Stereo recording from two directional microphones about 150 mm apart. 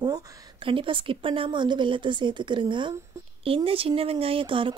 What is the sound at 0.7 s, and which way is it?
Speech, 35° right (ahead or behind).